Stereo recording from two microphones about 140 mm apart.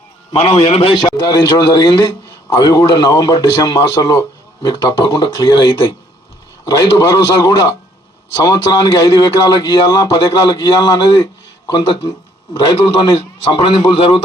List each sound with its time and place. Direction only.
0.3 s a man's voice: 45° left (ahead or behind)
13.5 s a man's voice: 30° left (ahead or behind)